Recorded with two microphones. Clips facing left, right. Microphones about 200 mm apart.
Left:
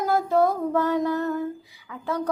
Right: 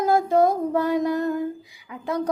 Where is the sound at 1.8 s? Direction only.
15° right (ahead or behind).